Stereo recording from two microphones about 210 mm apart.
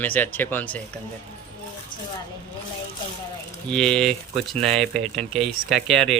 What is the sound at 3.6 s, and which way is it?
Speech, 5° left (ahead or behind).